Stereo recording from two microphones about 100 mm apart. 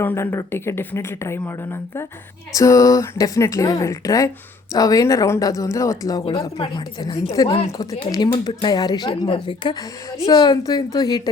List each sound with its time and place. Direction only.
0.0 s speech: 20° left (ahead or behind)
6.6 s a woman's voice: 60° left (ahead or behind)
7.4 s speech: 40° left (ahead or behind)